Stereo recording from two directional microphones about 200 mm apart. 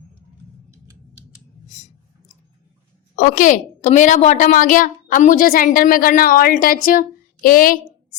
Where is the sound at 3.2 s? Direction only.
40° left (ahead or behind).